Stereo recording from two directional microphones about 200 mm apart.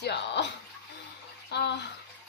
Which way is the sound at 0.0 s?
60° left (ahead or behind).